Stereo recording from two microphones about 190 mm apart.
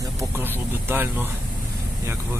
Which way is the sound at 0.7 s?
10° right (ahead or behind).